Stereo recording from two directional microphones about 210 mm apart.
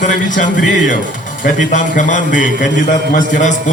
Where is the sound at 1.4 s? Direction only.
35° left (ahead or behind).